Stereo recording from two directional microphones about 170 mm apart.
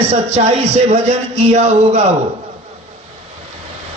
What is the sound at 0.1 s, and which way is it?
Speech, 40° right (ahead or behind).